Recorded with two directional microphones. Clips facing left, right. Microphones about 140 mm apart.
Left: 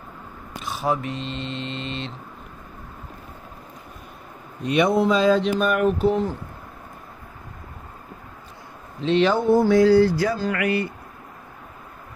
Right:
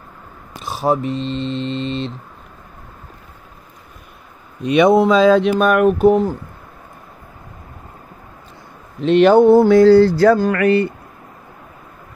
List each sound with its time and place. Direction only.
0.6 s mantra: 35° right (ahead or behind)
4.6 s speech: 90° right; by 6.3 s 45° right (ahead or behind)
9.0 s a sound: 55° right (ahead or behind)